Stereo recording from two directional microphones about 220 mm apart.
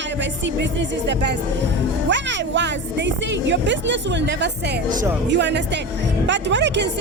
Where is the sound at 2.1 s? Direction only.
55° right (ahead or behind).